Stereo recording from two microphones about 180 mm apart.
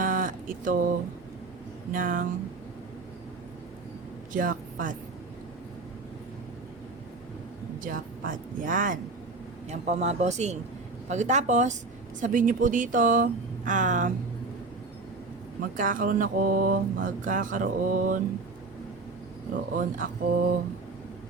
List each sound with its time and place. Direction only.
0.0 s a sound: 50° right (ahead or behind)
1.9 s speech: 50° right (ahead or behind)
4.3 s a woman's voice: 50° right (ahead or behind)
7.9 s speech: 50° right (ahead or behind)
15.8 s speech: 50° right (ahead or behind)
19.7 s speech: 45° right (ahead or behind)